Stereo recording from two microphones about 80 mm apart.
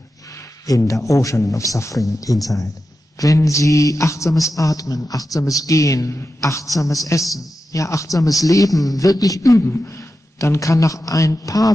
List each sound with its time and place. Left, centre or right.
0.3 s a man's voice: left